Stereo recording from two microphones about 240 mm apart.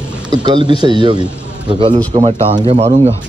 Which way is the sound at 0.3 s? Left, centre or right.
Centre.